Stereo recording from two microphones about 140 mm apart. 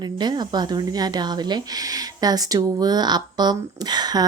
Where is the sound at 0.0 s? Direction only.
30° right (ahead or behind).